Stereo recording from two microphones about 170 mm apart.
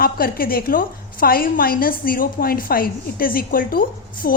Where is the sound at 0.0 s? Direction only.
60° left (ahead or behind).